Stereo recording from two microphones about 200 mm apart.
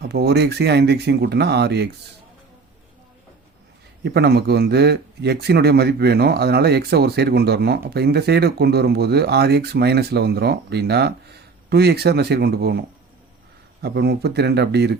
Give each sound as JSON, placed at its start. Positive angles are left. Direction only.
{"t": 0.1, "sound": "speech", "side_deg": -55}
{"t": 4.0, "sound": "a man's voice", "side_deg": -55}
{"t": 13.8, "sound": "speech", "side_deg": -55}